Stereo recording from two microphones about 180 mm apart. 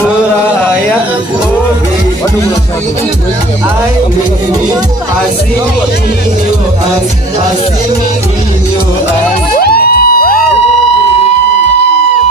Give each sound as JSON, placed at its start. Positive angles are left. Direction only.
{"t": 9.5, "sound": "music", "side_deg": 60}